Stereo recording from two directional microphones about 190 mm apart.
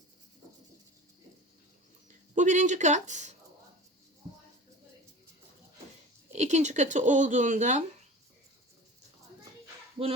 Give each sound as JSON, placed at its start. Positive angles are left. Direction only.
{"t": 2.3, "sound": "speech", "side_deg": -40}
{"t": 6.3, "sound": "speech", "side_deg": -35}